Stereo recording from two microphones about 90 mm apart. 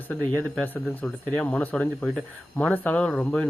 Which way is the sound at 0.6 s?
15° left (ahead or behind).